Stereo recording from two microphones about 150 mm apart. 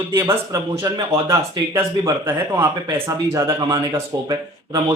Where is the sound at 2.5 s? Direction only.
20° right (ahead or behind).